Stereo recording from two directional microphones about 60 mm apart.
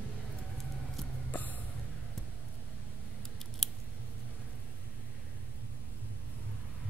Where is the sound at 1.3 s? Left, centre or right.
Left.